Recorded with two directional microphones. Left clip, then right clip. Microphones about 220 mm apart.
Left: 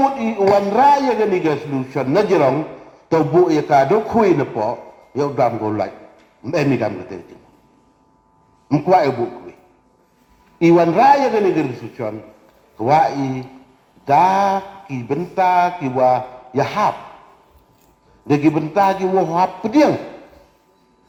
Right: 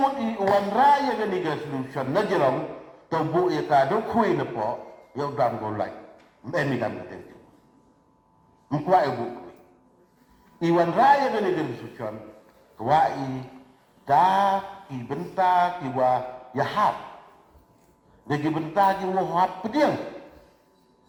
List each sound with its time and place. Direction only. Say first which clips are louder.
0.0 s mantra: left 7 dB; 40° left (ahead or behind)
8.7 s mantra: left 7 dB; 40° left (ahead or behind)
10.6 s mantra: left 8 dB; 40° left (ahead or behind)
12.7 s speech: left 6 dB; 40° left (ahead or behind)
14.0 s mantra: left 6 dB; 40° left (ahead or behind)
18.3 s mantra: left 10 dB; 40° left (ahead or behind)